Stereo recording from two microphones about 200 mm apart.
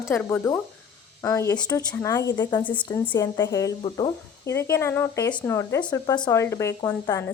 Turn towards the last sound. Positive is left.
turn(degrees=15)  # may be behind; listen again after turning